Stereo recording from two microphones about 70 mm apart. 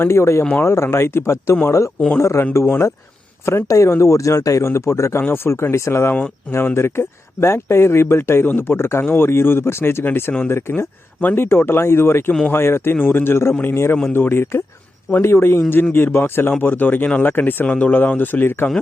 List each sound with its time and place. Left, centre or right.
0.0 s speech: left